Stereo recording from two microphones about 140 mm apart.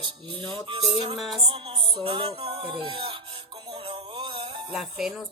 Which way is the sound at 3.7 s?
40° right (ahead or behind).